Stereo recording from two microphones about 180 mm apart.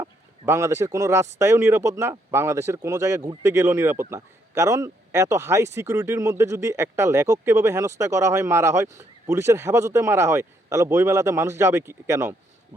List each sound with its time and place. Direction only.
0.0 s speech: 15° right (ahead or behind)